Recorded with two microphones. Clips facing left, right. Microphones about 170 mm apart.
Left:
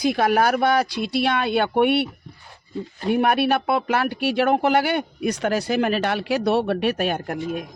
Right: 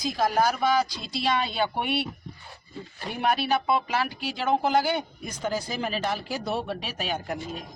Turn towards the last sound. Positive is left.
turn(degrees=55)  # may be behind; listen again after turning